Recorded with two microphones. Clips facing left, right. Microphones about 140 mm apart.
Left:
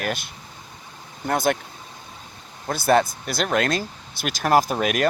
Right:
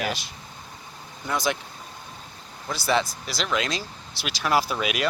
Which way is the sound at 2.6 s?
50° left (ahead or behind).